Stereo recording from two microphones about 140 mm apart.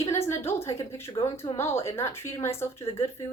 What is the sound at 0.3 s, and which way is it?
A woman's voice, 20° left (ahead or behind).